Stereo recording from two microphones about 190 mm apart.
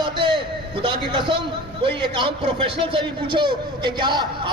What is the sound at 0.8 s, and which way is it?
A man's voice, 25° right (ahead or behind).